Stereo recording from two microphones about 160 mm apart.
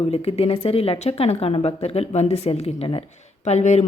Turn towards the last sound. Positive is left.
turn(degrees=45)  # may be behind; listen again after turning